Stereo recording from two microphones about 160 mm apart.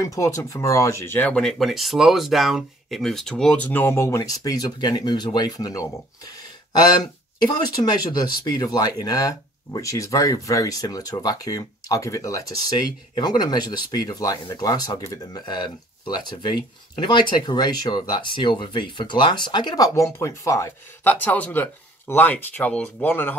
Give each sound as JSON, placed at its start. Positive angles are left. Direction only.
{"t": 0.0, "sound": "speech", "side_deg": 20}